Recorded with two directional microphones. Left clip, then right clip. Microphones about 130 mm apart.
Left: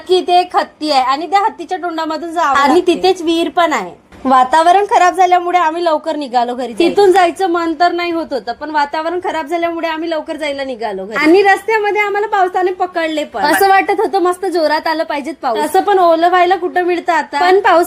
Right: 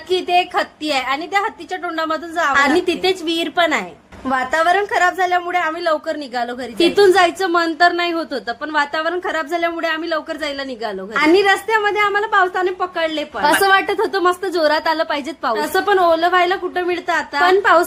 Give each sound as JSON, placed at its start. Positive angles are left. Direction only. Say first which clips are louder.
{"t": 0.1, "sound": "a woman's voice", "louder": "left 5 dB", "side_deg": 25}
{"t": 4.3, "sound": "a woman's voice", "louder": "left 7 dB", "side_deg": 35}
{"t": 6.7, "sound": "a woman's voice", "louder": "left 3 dB", "side_deg": 5}
{"t": 11.4, "sound": "a woman's voice", "louder": "left 4 dB", "side_deg": 25}
{"t": 13.5, "sound": "a woman's voice", "louder": "left 4 dB", "side_deg": 20}
{"t": 15.5, "sound": "a woman's voice", "louder": "left 5 dB", "side_deg": 30}